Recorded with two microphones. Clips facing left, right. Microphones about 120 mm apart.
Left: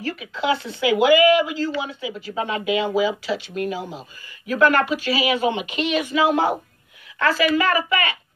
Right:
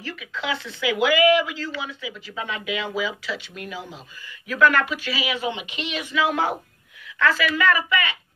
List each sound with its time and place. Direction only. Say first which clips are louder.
0.0 s speech: left 6 dB; 45° left (ahead or behind)